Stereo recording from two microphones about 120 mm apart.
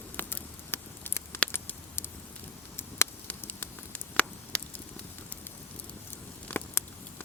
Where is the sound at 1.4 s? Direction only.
15° left (ahead or behind).